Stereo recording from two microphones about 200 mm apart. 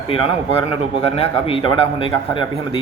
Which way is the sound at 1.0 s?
30° left (ahead or behind).